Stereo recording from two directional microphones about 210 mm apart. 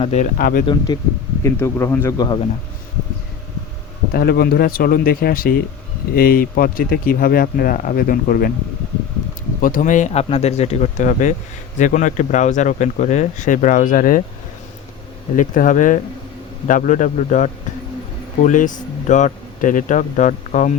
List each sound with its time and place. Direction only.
0.0 s speech: 30° left (ahead or behind)
0.3 s speech: 45° left (ahead or behind)
0.9 s speech: 20° left (ahead or behind)
4.1 s speech: 45° left (ahead or behind)
9.6 s speech: 40° left (ahead or behind)
15.4 s speech: 40° left (ahead or behind)